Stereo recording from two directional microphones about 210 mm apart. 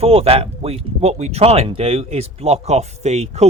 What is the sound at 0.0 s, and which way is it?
Speech, 30° right (ahead or behind).